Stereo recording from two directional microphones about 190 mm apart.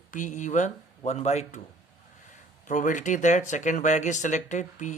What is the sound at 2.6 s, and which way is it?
Speech, 45° left (ahead or behind).